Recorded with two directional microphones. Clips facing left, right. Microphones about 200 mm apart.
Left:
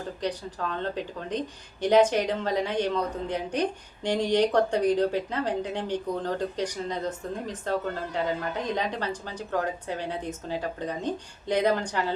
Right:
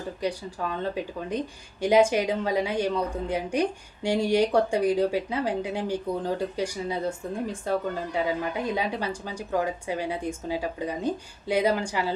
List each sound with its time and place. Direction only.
0.2 s speech: 10° right (ahead or behind)